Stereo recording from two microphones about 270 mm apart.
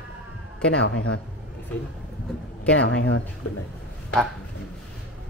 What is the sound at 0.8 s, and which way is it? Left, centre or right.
Speech, left.